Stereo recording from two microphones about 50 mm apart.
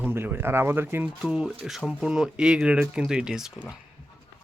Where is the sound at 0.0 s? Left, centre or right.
Right.